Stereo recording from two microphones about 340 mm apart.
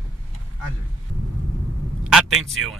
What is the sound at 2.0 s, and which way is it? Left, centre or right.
Speech, centre.